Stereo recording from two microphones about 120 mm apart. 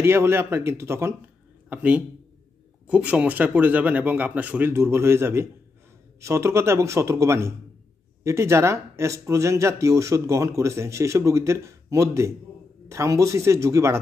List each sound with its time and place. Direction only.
0.0 s a man's voice: 20° right (ahead or behind)